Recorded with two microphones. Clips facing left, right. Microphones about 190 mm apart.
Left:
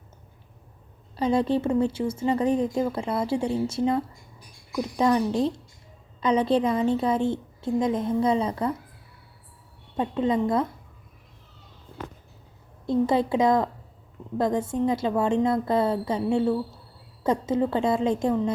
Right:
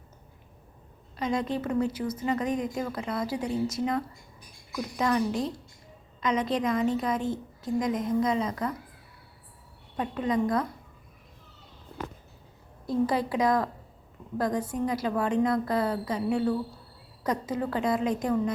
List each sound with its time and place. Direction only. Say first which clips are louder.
1.1 s speech: left 6 dB; 30° left (ahead or behind)
10.0 s speech: left 3 dB; 25° left (ahead or behind)
12.8 s speech: left 4 dB; 25° left (ahead or behind)